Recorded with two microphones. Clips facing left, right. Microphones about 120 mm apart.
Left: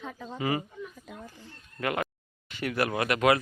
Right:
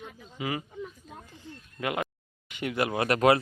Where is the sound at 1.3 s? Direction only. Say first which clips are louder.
Right 1 dB; 15° right (ahead or behind).